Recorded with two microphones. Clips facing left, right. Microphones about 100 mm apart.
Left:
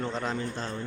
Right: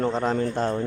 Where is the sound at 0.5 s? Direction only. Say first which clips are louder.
Right 10 dB; 50° right (ahead or behind).